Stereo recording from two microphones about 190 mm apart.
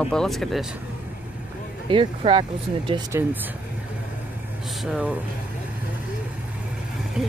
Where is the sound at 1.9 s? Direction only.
30° right (ahead or behind).